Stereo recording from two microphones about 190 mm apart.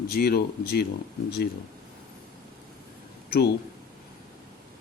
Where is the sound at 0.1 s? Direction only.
55° left (ahead or behind).